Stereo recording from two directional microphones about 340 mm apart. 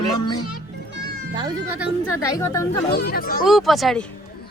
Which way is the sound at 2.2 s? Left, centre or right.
Centre.